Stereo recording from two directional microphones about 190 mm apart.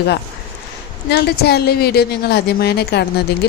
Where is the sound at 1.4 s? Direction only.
55° left (ahead or behind).